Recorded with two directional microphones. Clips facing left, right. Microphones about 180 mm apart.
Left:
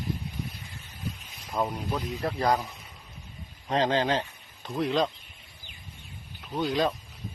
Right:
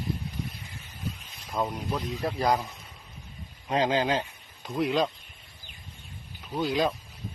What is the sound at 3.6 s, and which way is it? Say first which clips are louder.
Speech: even; 10° right (ahead or behind).